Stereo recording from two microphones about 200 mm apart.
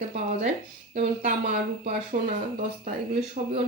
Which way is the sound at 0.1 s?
40° right (ahead or behind).